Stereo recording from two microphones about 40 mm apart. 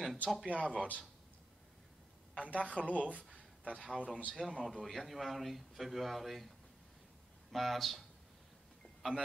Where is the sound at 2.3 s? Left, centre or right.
Right.